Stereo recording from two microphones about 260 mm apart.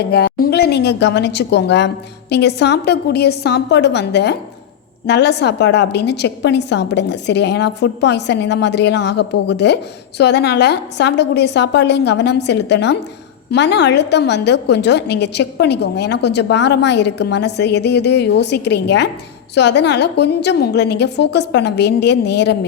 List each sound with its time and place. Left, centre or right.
0.1 s a woman's voice: left